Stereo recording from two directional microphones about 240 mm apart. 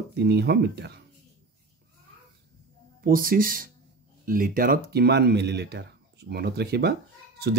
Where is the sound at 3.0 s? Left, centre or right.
Right.